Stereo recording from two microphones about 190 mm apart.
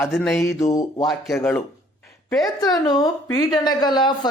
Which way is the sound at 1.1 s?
Centre (ahead or behind).